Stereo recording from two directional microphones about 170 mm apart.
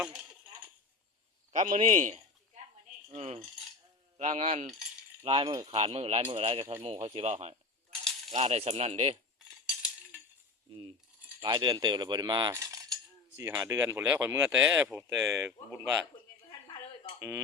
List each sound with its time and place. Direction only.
1.5 s a man's voice: 45° right (ahead or behind)
5.2 s speech: 30° right (ahead or behind)
5.7 s speech: 35° right (ahead or behind)
9.6 s a sound: 5° right (ahead or behind)
10.7 s speech: 30° right (ahead or behind); by 15.8 s 15° right (ahead or behind)
16.5 s a sound: 25° left (ahead or behind)
17.2 s speech: 15° right (ahead or behind)